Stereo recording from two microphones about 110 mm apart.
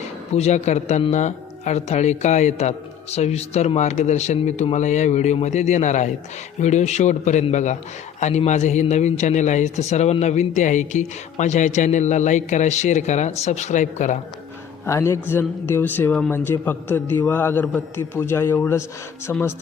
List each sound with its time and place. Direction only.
0.3 s a man's voice: 90° left
14.8 s speech: 25° left (ahead or behind)